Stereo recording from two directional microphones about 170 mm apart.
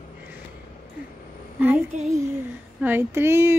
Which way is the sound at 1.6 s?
10° right (ahead or behind).